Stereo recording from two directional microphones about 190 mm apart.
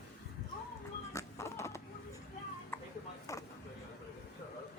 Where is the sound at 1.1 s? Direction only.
15° left (ahead or behind).